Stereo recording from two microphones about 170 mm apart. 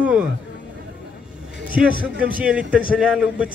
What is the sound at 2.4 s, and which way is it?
Speech, 10° right (ahead or behind).